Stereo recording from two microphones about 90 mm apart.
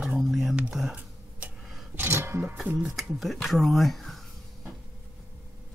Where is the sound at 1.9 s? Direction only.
25° right (ahead or behind).